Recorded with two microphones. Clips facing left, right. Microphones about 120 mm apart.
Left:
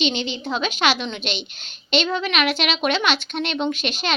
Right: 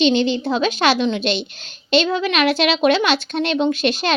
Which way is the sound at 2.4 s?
35° right (ahead or behind).